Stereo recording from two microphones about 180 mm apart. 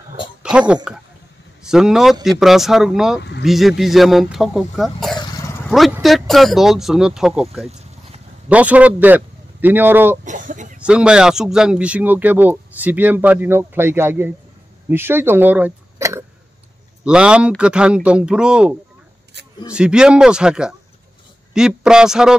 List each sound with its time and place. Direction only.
0.4 s a man's voice: 5° right (ahead or behind)
10.2 s a sound: 45° right (ahead or behind)
10.8 s speech: 5° right (ahead or behind)
17.0 s speech: 5° right (ahead or behind)
19.4 s a sound: 70° right (ahead or behind)
19.7 s speech: 5° right (ahead or behind)